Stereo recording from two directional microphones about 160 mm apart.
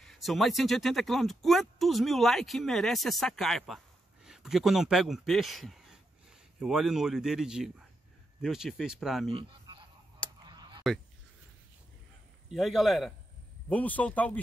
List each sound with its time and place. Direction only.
0.0 s speech: centre (ahead or behind)
9.3 s a sound: 30° right (ahead or behind)
10.4 s honk: 25° right (ahead or behind)
12.4 s speech: centre (ahead or behind)